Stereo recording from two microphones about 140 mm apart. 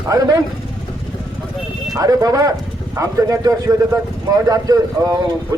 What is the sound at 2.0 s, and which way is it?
A man's voice, 25° right (ahead or behind).